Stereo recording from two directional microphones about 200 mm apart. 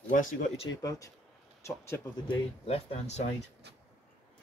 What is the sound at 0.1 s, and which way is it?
Speech, 40° left (ahead or behind).